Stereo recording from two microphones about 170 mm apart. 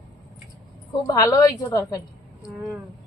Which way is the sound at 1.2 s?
20° left (ahead or behind).